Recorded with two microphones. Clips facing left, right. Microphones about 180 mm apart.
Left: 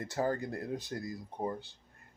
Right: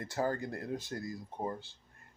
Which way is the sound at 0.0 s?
25° left (ahead or behind).